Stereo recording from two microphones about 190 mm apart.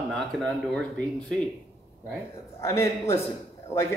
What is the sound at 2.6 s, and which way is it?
Speech, 15° left (ahead or behind).